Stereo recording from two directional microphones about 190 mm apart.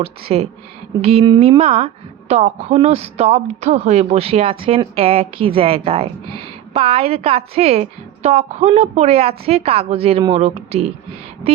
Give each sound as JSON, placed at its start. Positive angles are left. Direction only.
{"t": 0.0, "sound": "a woman's voice", "side_deg": -30}